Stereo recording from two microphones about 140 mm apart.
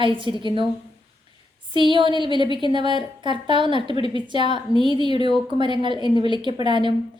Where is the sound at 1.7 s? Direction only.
35° right (ahead or behind).